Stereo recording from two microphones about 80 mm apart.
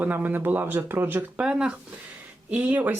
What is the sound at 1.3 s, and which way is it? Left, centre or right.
Speech, centre.